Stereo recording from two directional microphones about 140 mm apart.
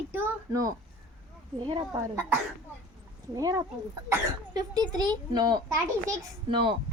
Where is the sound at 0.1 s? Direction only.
15° right (ahead or behind).